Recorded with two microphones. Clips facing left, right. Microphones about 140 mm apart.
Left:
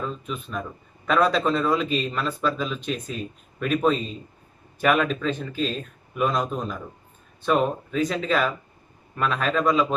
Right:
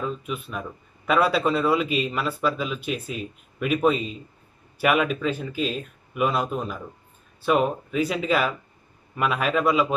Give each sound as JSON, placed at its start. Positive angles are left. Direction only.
{"t": 0.0, "sound": "a man's voice", "side_deg": -5}